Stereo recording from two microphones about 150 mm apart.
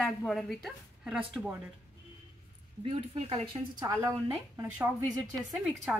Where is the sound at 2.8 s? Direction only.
40° right (ahead or behind).